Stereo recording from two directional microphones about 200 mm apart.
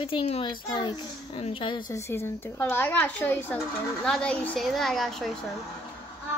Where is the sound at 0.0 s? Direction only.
25° left (ahead or behind).